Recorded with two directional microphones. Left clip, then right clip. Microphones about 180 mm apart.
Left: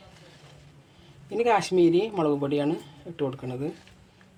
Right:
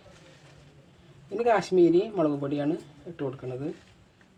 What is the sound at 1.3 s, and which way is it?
Speech, 35° left (ahead or behind).